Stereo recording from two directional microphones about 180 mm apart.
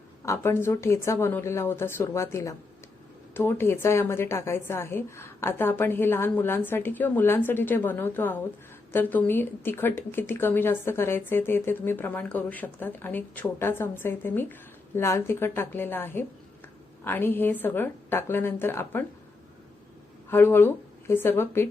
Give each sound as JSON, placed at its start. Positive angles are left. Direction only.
{"t": 0.3, "sound": "a woman's voice", "side_deg": 15}
{"t": 20.3, "sound": "a woman's voice", "side_deg": 10}